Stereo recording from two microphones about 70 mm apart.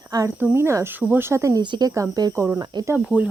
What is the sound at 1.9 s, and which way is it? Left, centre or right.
Speech, right.